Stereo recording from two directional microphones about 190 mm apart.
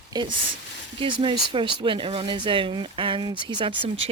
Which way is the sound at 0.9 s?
25° right (ahead or behind).